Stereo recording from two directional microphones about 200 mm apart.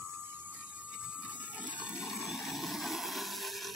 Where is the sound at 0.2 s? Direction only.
10° right (ahead or behind).